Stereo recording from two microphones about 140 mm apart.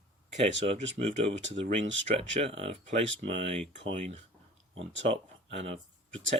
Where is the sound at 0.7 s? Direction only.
45° right (ahead or behind).